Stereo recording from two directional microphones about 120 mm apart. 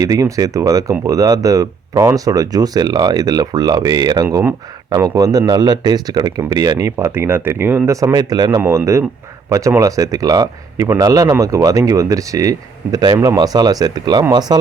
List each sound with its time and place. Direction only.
0.0 s speech: 30° right (ahead or behind)
8.6 s speech: 25° right (ahead or behind)